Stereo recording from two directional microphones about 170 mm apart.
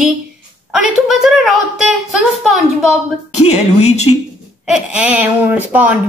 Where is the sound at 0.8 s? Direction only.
Centre (ahead or behind).